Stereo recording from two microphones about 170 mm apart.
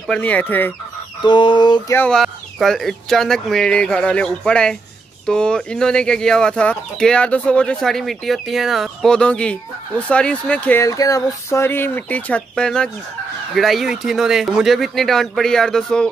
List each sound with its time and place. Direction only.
0.0 s fowl: 5° left (ahead or behind)
1.2 s chicken: 30° left (ahead or behind)
2.0 s speech: 5° left (ahead or behind)